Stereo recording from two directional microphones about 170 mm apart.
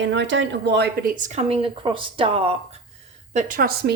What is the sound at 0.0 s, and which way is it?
Speech, 90° right.